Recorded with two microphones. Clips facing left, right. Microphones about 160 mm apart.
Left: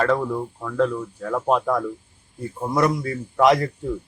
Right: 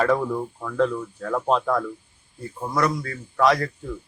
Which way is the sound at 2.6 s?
20° left (ahead or behind).